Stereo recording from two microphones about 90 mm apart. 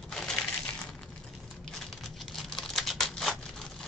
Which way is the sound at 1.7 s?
Centre (ahead or behind).